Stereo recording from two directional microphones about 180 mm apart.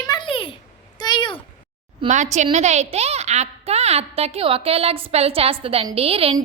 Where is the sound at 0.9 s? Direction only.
25° left (ahead or behind).